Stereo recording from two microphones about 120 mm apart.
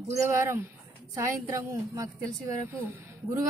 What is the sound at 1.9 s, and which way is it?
Speech, 25° right (ahead or behind).